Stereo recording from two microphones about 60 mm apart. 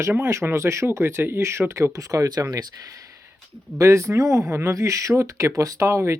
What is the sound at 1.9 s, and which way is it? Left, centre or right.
Speech, right.